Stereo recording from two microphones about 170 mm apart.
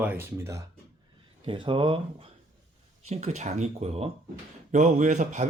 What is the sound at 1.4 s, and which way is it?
Speech, 30° right (ahead or behind).